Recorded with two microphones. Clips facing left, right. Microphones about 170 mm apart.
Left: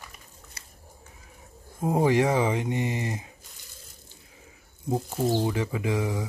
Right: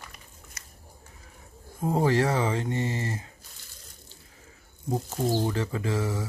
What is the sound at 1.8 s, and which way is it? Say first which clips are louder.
Speech: left 2 dB; 15° left (ahead or behind).